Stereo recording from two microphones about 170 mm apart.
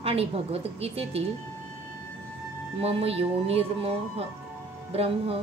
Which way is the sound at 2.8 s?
35° right (ahead or behind).